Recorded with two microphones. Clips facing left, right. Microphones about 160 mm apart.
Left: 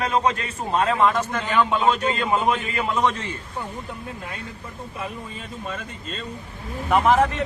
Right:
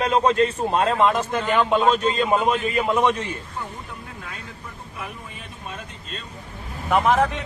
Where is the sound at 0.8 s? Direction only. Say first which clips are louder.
Right 1 dB; 20° right (ahead or behind).